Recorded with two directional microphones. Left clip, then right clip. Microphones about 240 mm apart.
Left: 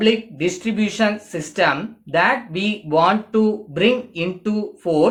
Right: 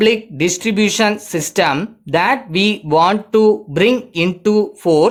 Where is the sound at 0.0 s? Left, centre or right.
Right.